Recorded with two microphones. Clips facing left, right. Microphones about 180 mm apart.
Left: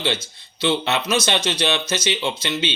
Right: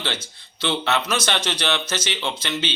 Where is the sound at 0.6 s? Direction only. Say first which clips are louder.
Left 2 dB; 10° left (ahead or behind).